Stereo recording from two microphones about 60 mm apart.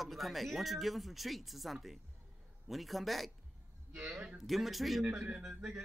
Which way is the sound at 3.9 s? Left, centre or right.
Centre.